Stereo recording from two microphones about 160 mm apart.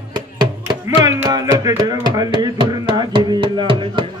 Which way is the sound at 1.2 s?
20° right (ahead or behind).